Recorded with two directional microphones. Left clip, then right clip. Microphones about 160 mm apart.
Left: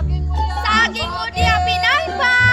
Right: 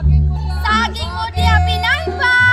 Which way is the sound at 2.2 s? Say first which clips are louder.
Right 3 dB; 60° left (ahead or behind).